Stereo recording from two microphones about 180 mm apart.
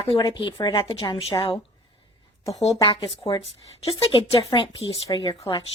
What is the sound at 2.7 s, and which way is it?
A woman's voice, 30° left (ahead or behind).